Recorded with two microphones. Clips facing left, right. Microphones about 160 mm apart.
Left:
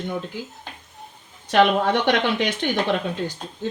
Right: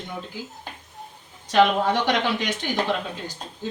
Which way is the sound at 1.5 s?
60° left (ahead or behind).